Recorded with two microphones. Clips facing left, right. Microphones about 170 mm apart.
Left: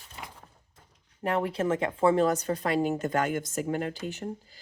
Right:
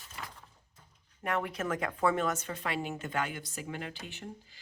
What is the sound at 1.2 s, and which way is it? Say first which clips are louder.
Speech: left 6 dB; 30° left (ahead or behind).